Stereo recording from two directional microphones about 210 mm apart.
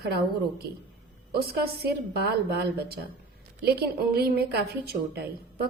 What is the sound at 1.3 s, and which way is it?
Speech, 50° right (ahead or behind).